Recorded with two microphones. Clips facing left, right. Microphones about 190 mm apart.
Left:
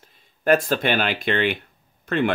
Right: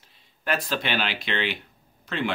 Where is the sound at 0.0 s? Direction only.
50° left (ahead or behind).